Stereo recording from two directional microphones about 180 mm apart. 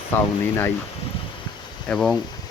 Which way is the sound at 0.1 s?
10° left (ahead or behind).